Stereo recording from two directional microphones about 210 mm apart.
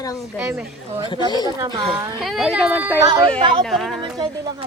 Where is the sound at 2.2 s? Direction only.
Centre (ahead or behind).